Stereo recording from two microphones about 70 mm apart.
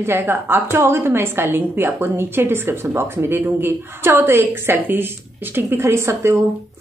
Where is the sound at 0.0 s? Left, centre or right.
Right.